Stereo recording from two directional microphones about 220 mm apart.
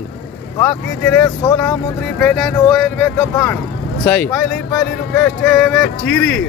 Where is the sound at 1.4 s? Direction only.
15° left (ahead or behind).